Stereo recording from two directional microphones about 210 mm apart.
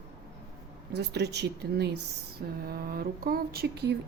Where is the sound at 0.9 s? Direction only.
50° right (ahead or behind).